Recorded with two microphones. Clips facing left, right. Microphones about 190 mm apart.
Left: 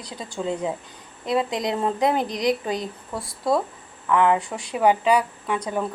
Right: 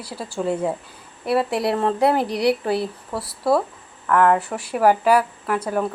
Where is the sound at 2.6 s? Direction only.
15° left (ahead or behind).